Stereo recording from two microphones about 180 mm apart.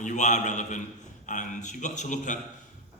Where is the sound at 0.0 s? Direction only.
40° left (ahead or behind).